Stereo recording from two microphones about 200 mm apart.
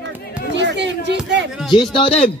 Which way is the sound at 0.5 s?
60° right (ahead or behind).